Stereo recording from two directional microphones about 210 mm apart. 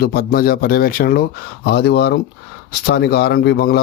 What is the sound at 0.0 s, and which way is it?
Speech, 45° left (ahead or behind).